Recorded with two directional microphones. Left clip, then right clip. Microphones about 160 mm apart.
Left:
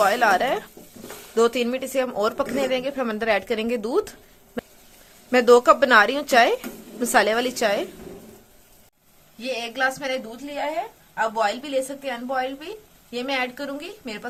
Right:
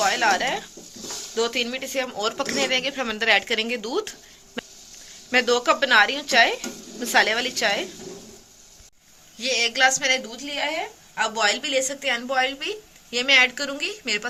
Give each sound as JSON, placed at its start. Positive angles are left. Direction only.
{"t": 0.0, "sound": "a woman's voice", "side_deg": 55}
{"t": 4.6, "sound": "a sound", "side_deg": 35}
{"t": 5.3, "sound": "speech", "side_deg": 55}
{"t": 9.4, "sound": "a woman's voice", "side_deg": 30}